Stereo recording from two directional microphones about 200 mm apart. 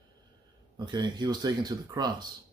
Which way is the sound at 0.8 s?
20° right (ahead or behind).